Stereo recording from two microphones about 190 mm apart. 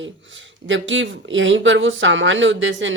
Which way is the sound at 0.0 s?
85° right.